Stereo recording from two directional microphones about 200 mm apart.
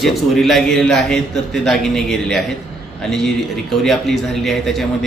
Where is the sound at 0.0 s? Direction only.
Centre (ahead or behind).